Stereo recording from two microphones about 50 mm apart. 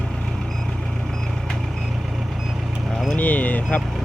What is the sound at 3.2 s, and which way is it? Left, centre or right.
Vehicle, left.